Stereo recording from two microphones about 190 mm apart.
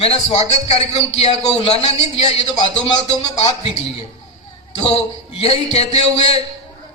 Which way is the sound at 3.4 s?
30° left (ahead or behind).